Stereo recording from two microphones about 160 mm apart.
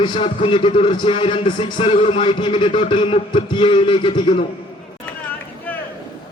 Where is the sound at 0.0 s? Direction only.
30° left (ahead or behind).